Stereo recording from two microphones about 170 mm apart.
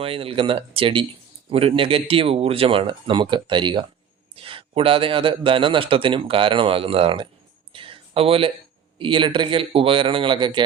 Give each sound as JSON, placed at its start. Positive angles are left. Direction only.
{"t": 0.0, "sound": "speech", "side_deg": -35}
{"t": 7.7, "sound": "a sound", "side_deg": -30}
{"t": 9.0, "sound": "a man's voice", "side_deg": -30}